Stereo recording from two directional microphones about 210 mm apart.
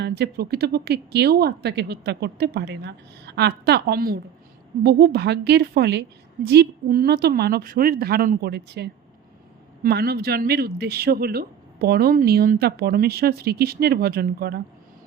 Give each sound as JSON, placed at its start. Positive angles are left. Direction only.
{"t": 0.0, "sound": "speech", "side_deg": -50}